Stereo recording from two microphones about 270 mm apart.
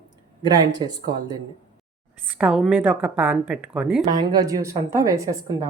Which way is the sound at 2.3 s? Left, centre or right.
Centre.